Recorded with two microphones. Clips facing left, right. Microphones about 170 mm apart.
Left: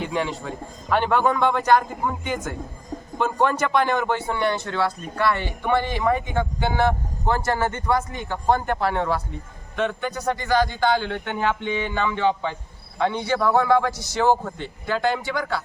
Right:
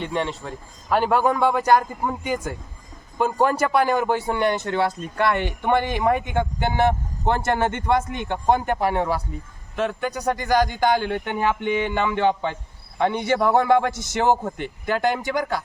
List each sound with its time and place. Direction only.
0.0 s a man's voice: centre (ahead or behind); by 15.6 s 15° right (ahead or behind)